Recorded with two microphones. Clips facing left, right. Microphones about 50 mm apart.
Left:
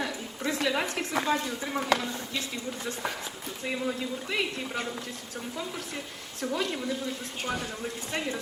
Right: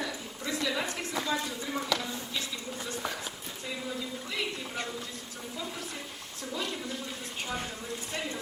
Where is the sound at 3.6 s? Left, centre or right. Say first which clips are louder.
Left 6 dB; left.